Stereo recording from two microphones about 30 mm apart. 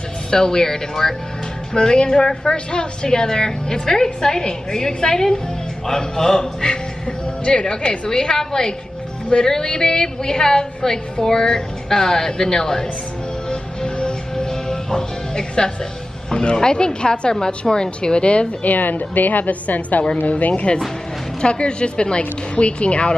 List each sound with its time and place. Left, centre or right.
0.3 s a man's voice: left
6.6 s speech: left
8.1 s speech: left
14.3 s music: left
16.3 s speech: left
18.6 s a woman's voice: left
21.4 s speech: left